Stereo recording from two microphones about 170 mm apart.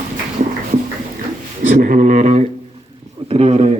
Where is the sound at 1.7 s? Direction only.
50° right (ahead or behind).